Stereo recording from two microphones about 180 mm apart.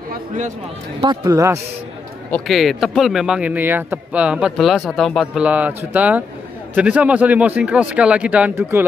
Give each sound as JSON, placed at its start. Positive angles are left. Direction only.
{"t": 1.0, "sound": "speech", "side_deg": -15}
{"t": 2.3, "sound": "a man's voice", "side_deg": 0}